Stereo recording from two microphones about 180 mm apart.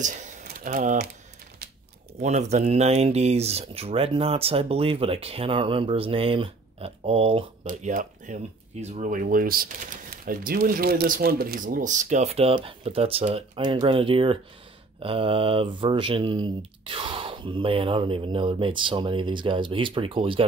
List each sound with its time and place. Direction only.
0.0 s speech: 45° right (ahead or behind)
2.1 s speech: 40° right (ahead or behind)
7.6 s speech: 45° right (ahead or behind); by 20.4 s 30° right (ahead or behind)